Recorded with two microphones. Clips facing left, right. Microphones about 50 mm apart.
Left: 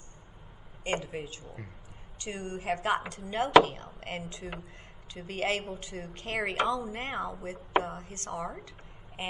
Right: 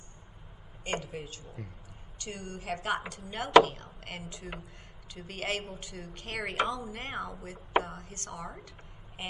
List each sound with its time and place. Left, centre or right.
0.8 s a woman's voice: left
2.2 s a woman's voice: left
8.6 s a sound: left